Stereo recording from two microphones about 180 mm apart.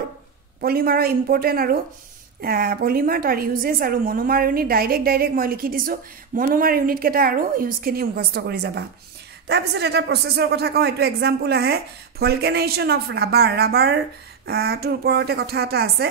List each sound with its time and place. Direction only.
0.6 s a woman's voice: 55° right (ahead or behind)